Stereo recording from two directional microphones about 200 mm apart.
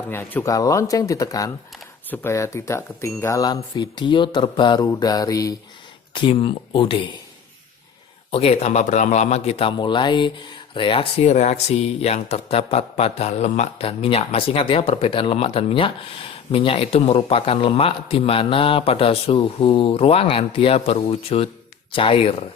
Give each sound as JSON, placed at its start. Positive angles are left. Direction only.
{"t": 0.1, "sound": "speech", "side_deg": 10}
{"t": 8.3, "sound": "speech", "side_deg": 30}